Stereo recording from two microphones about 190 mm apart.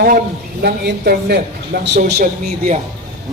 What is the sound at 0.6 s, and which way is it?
A man's voice, 55° right (ahead or behind).